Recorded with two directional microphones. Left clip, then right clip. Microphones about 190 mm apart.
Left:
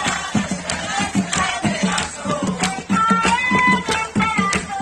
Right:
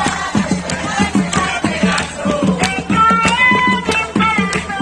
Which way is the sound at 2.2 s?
70° left (ahead or behind).